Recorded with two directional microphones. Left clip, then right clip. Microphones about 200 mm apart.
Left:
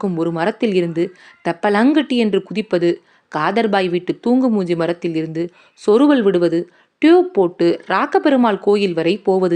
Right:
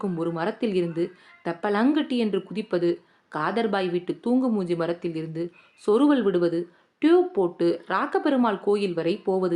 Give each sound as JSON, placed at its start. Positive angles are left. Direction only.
{"t": 0.0, "sound": "a woman's voice", "side_deg": 25}